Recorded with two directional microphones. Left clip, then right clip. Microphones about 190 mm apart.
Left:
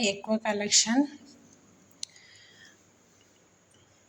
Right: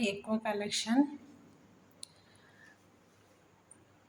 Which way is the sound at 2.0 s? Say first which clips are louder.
Left 11 dB; 10° left (ahead or behind).